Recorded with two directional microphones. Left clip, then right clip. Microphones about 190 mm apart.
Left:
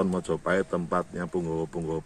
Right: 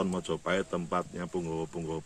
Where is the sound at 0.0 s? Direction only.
Centre (ahead or behind).